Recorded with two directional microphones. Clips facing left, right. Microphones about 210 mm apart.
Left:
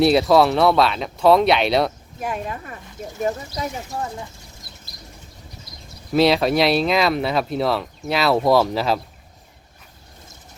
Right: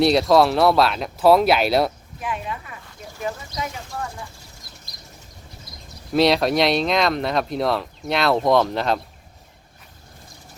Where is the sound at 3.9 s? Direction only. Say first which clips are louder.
Left 3 dB; 20° left (ahead or behind).